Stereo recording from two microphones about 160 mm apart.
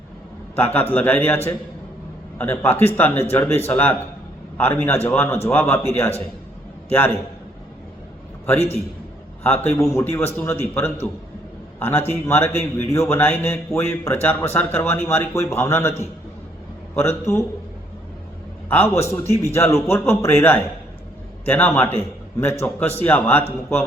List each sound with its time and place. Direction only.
0.5 s a man's voice: 10° left (ahead or behind)
9.4 s a man's voice: 10° left (ahead or behind)
18.7 s a man's voice: 15° left (ahead or behind)